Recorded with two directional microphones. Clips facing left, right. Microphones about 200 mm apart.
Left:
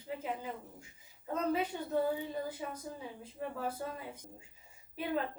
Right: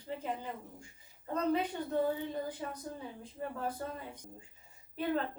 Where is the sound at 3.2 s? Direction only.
5° left (ahead or behind).